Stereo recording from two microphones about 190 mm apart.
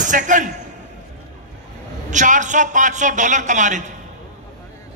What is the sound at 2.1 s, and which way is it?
A man's voice, 40° right (ahead or behind).